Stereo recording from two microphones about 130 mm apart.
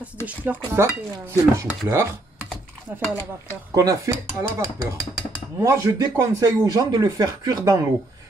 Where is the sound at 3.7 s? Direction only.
25° right (ahead or behind).